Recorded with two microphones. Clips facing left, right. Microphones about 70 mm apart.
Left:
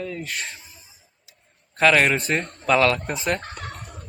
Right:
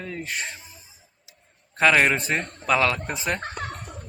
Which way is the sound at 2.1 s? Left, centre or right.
Centre.